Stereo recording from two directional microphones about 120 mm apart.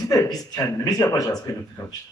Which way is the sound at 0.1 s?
30° left (ahead or behind).